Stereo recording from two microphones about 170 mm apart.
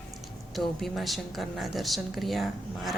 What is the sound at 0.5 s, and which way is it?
A woman's voice, centre (ahead or behind).